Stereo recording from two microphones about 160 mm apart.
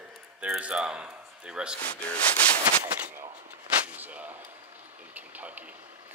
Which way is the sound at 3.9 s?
10° right (ahead or behind).